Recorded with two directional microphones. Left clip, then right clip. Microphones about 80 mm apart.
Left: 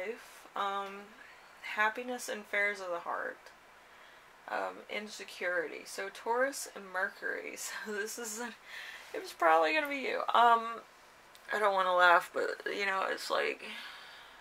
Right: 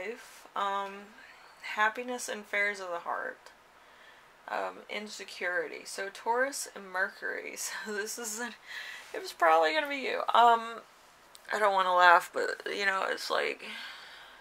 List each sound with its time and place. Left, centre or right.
0.0 s a sound: right
1.6 s speech: right
4.5 s speech: right